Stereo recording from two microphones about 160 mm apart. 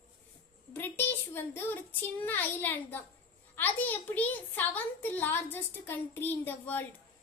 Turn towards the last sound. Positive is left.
turn(degrees=10)  # may be behind; listen again after turning